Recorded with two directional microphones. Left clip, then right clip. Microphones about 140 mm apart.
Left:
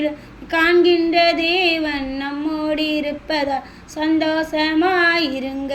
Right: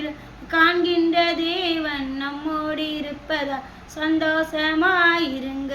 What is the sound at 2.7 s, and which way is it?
Speech, 35° right (ahead or behind).